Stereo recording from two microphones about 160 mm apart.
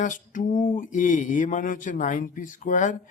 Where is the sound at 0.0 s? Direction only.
55° left (ahead or behind).